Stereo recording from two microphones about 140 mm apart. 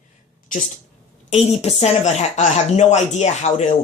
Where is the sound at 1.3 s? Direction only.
50° left (ahead or behind).